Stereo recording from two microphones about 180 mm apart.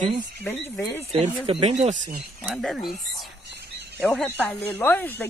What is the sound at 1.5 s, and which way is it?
Speech, 30° right (ahead or behind).